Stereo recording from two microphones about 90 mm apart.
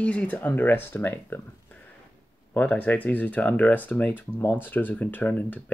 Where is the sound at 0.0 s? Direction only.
15° left (ahead or behind).